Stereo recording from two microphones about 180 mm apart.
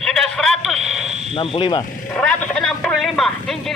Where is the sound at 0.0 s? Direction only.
5° left (ahead or behind).